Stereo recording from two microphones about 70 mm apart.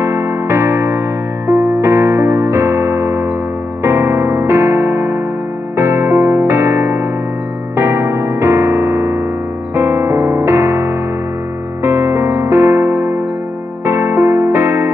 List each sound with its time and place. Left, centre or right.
0.0 s music: right
9.8 s piano: right
11.8 s music: right